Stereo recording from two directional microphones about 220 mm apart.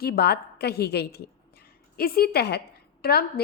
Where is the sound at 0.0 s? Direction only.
45° left (ahead or behind).